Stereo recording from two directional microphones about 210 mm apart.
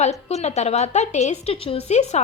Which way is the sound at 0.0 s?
30° left (ahead or behind).